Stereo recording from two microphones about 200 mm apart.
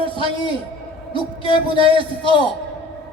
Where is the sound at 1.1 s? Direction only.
25° left (ahead or behind).